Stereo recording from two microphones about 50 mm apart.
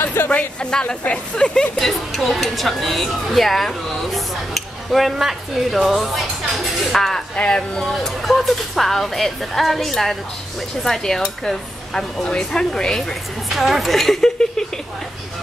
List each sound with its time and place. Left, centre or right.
0.2 s a sound: left
0.6 s speech: centre
1.8 s a woman's voice: centre
7.3 s speech: centre
8.0 s a woman's voice: centre
13.0 s a woman's voice: centre